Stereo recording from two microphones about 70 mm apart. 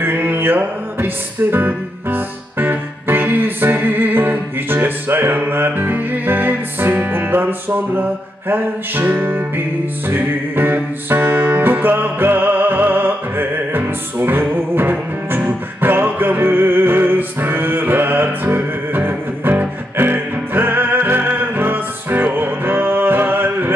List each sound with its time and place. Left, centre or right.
0.0 s music: right